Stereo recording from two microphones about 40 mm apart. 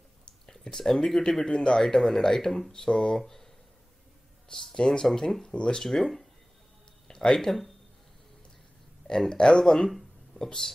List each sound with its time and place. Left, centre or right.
0.5 s speech: centre
1.4 s speech: left
4.5 s speech: centre
5.5 s speech: left
5.9 s speech: centre
7.1 s a sound: centre
7.3 s speech: centre
9.4 s speech: left
9.8 s a sound: centre
10.4 s speech: centre